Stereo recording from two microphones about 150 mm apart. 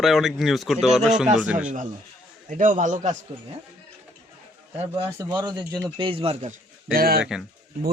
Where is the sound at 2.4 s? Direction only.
60° right (ahead or behind).